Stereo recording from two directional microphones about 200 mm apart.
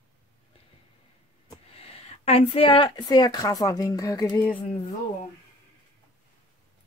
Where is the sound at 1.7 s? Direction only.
30° left (ahead or behind); by 4.6 s 10° left (ahead or behind).